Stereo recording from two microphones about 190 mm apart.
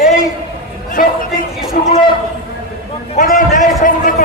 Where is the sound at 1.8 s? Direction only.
45° left (ahead or behind).